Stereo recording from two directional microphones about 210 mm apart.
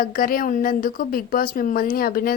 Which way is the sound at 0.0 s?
40° left (ahead or behind).